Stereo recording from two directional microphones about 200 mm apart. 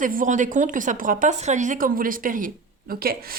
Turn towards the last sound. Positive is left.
turn(degrees=-50)  # may be behind; listen again after turning